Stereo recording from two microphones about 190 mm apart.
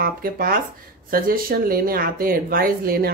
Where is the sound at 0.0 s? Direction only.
50° right (ahead or behind).